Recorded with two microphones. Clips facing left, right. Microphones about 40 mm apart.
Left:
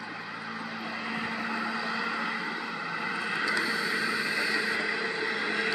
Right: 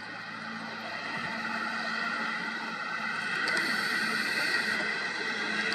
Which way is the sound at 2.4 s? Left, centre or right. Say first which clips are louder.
Left 1 dB; centre.